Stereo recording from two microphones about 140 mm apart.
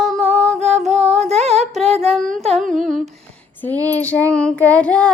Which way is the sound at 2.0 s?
Centre (ahead or behind).